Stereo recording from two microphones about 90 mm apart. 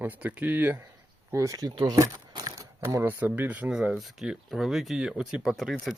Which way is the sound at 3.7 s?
5° right (ahead or behind).